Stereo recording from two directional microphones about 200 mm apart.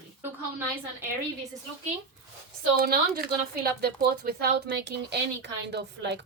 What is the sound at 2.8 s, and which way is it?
Speech, 50° right (ahead or behind).